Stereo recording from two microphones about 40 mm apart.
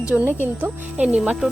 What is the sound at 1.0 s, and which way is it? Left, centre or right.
Speech, right.